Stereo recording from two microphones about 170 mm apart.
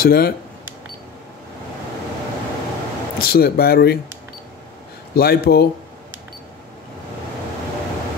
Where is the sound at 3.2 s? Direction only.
65° left (ahead or behind).